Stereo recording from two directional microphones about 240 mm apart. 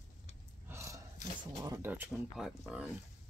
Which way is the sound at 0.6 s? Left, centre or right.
Centre.